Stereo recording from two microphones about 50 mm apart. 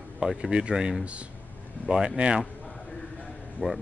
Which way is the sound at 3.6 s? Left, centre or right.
Right.